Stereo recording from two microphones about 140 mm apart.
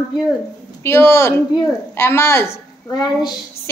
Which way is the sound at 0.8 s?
20° left (ahead or behind).